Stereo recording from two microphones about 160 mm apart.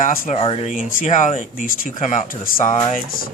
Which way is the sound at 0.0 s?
55° left (ahead or behind).